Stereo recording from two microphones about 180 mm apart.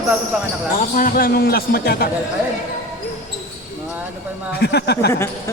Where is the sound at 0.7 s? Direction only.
50° left (ahead or behind).